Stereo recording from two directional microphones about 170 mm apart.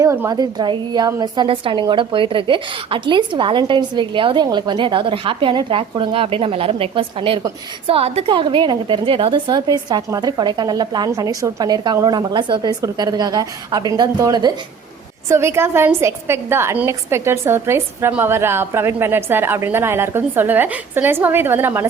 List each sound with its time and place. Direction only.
0.0 s a woman's voice: 20° right (ahead or behind)